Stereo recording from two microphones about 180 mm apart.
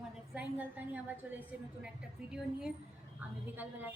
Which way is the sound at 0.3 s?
10° right (ahead or behind).